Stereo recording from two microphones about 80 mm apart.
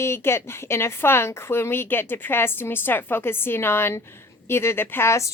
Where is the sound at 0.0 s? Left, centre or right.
Left.